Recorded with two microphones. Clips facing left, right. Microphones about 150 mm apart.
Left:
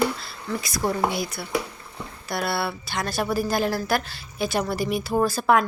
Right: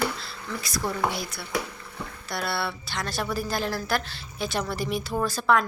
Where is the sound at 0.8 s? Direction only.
50° left (ahead or behind).